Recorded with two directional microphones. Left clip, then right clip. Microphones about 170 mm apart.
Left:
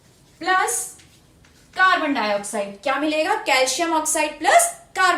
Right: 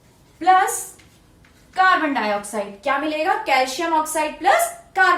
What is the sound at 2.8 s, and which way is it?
A woman's voice, 20° left (ahead or behind).